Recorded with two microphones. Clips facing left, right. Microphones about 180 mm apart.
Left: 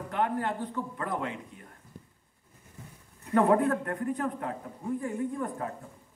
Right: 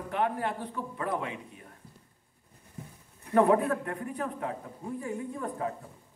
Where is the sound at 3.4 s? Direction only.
20° right (ahead or behind).